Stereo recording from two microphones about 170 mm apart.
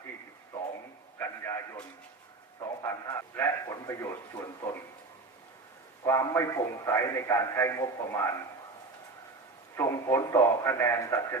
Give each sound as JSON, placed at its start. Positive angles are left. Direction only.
{"t": 1.2, "sound": "a sound", "side_deg": 15}
{"t": 2.8, "sound": "a man's voice", "side_deg": 15}
{"t": 6.1, "sound": "a man's voice", "side_deg": 15}
{"t": 9.7, "sound": "a man's voice", "side_deg": 15}